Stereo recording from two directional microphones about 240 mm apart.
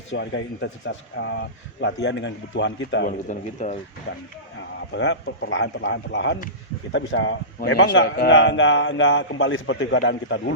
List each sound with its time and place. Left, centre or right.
0.1 s a man's voice: left
3.1 s speech: left
4.1 s a man's voice: left